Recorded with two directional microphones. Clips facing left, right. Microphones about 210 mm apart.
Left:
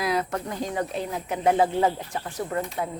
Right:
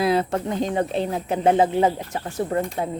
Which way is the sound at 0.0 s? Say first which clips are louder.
Right 6 dB; 30° right (ahead or behind).